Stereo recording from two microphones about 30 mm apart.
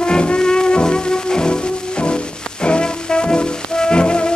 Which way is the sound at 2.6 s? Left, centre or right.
Left.